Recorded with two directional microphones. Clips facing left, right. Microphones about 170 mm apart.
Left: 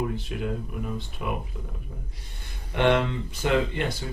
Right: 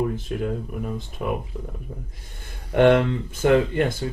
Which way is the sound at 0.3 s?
45° right (ahead or behind).